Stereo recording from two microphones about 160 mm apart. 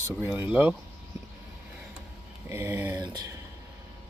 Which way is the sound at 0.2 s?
10° right (ahead or behind).